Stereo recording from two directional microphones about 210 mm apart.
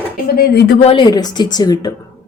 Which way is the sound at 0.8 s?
25° left (ahead or behind).